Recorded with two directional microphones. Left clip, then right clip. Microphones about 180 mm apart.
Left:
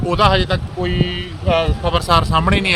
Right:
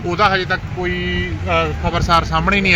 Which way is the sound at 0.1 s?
40° left (ahead or behind).